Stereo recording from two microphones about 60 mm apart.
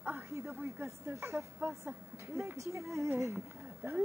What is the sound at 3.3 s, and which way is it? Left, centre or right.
Speech, right.